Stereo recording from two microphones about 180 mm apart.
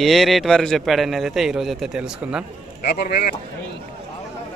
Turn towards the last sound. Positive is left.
turn(degrees=60)  # may be behind; listen again after turning